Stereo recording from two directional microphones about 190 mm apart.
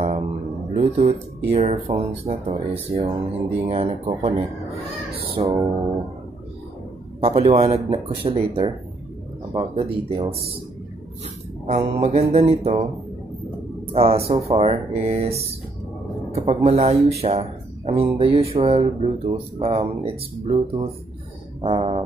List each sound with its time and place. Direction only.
0.7 s speech: 35° right (ahead or behind)
5.4 s speech: 20° right (ahead or behind)
7.2 s speech: 30° right (ahead or behind)
11.6 s speech: 35° right (ahead or behind)
13.9 s speech: 30° right (ahead or behind)
21.5 s music: 30° right (ahead or behind)